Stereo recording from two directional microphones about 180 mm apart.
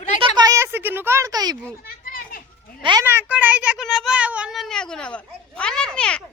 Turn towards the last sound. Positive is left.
turn(degrees=5)  # may be behind; listen again after turning